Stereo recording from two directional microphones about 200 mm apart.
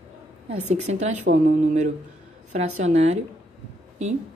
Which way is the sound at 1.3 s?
50° right (ahead or behind).